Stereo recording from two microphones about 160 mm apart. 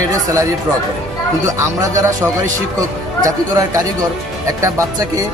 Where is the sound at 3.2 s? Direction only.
20° right (ahead or behind).